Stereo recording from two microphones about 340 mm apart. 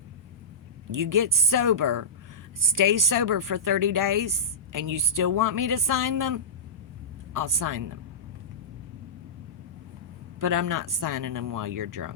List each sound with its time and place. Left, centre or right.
0.9 s speech: right
10.4 s speech: right